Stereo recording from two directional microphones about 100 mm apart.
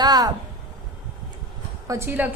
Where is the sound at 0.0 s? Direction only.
40° right (ahead or behind).